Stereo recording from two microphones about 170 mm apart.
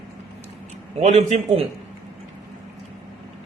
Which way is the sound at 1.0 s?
40° right (ahead or behind).